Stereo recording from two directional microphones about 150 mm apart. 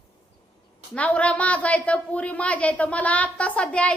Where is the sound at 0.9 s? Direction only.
10° left (ahead or behind).